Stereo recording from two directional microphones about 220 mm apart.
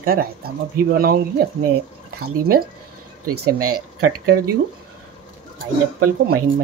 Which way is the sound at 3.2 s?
90° right.